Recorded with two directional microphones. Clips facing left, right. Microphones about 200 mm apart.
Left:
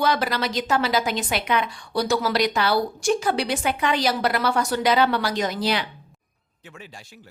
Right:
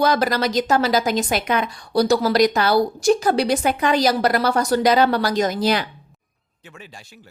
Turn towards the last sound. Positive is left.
turn(degrees=-45)  # may be behind; listen again after turning